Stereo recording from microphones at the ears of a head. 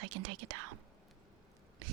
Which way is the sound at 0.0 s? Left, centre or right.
Right.